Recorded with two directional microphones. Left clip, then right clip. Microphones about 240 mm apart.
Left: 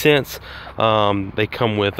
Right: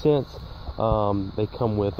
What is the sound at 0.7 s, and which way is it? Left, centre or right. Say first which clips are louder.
Speech: left 7 dB; left.